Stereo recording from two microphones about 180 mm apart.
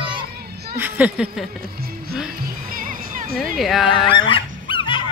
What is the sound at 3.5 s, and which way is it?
Speech, centre (ahead or behind).